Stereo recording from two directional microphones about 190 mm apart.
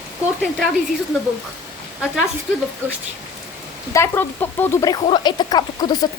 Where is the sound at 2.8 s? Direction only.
15° right (ahead or behind).